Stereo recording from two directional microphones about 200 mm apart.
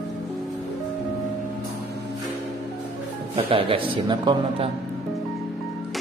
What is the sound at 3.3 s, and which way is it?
A man's voice, 30° right (ahead or behind).